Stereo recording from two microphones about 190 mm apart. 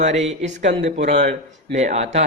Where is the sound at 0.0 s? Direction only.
35° right (ahead or behind).